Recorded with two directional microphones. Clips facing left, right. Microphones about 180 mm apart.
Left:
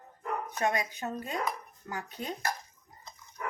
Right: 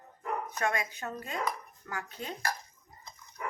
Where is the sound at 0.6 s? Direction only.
20° left (ahead or behind).